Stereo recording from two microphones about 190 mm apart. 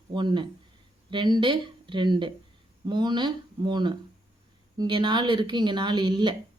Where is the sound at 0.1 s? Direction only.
25° right (ahead or behind).